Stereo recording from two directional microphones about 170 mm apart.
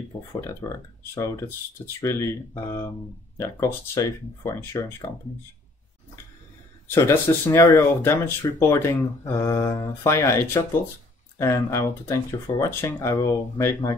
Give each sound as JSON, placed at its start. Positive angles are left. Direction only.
{"t": 0.6, "sound": "speech", "side_deg": 20}
{"t": 6.9, "sound": "speech", "side_deg": 15}